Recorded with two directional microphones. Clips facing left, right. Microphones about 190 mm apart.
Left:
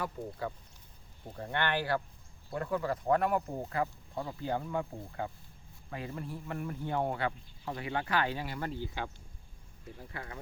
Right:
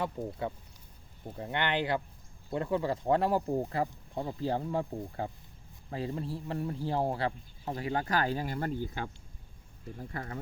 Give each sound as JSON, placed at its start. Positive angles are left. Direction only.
{"t": 0.0, "sound": "speech", "side_deg": -25}
{"t": 10.1, "sound": "speech", "side_deg": -40}